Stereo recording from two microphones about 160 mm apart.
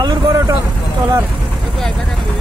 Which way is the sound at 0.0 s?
20° right (ahead or behind).